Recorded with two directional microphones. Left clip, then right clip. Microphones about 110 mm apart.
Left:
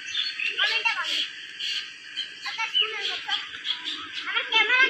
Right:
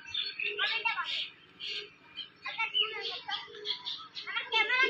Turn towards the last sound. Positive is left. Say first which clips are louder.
# left 8 dB
turn(degrees=25)  # may be behind; listen again after turning